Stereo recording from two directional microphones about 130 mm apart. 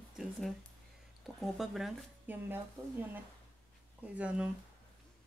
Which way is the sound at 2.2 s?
15° right (ahead or behind).